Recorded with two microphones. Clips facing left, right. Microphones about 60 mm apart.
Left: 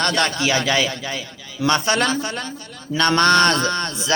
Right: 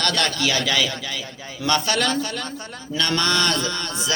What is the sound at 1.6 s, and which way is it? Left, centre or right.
Speech, centre.